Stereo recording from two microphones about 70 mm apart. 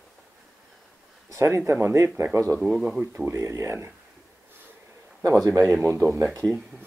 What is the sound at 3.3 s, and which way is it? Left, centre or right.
Speech, right.